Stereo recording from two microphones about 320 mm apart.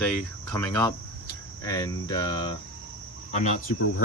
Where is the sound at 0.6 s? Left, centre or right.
Centre.